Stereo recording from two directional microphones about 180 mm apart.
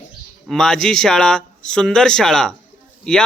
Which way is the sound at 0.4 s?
Centre (ahead or behind).